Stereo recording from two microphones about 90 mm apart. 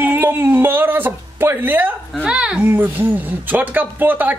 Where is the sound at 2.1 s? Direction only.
10° right (ahead or behind).